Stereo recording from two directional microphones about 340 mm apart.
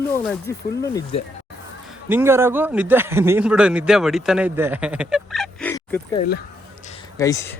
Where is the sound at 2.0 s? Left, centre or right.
Centre.